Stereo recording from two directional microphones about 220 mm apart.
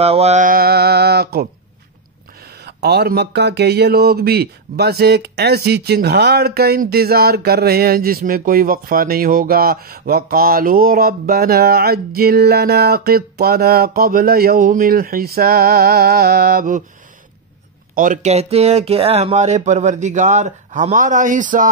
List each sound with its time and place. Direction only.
0.0 s speech: 30° right (ahead or behind); by 1.5 s 45° right (ahead or behind)
2.6 s speech: 45° right (ahead or behind)
17.9 s speech: 35° right (ahead or behind)